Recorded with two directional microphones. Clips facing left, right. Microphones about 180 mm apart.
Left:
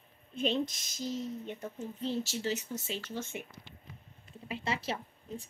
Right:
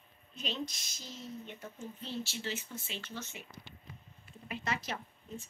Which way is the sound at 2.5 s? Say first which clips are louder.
Left 6 dB; 40° left (ahead or behind).